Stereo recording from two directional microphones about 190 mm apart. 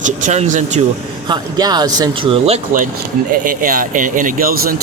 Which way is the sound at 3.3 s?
45° right (ahead or behind).